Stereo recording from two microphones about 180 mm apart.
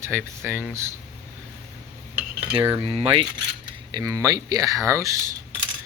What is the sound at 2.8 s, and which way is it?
Speech, 30° right (ahead or behind).